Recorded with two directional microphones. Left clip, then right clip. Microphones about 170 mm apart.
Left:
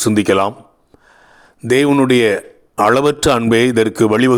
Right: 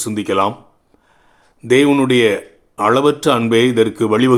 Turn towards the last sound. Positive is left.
turn(degrees=40)  # may be behind; listen again after turning